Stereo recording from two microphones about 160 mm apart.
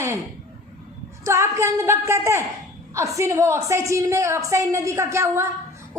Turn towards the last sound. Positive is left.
turn(degrees=-15)  # may be behind; listen again after turning